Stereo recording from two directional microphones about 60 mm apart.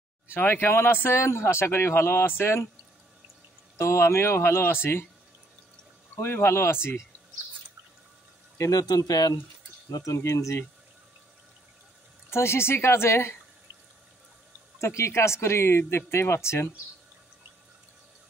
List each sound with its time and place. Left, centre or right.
0.3 s speech: left
3.7 s speech: left
6.2 s speech: left
8.5 s speech: left
9.8 s speech: left
10.2 s speech: left
12.3 s speech: left
14.8 s speech: left